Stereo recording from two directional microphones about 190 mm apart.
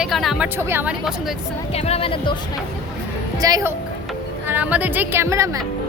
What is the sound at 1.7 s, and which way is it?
Speech, 30° left (ahead or behind).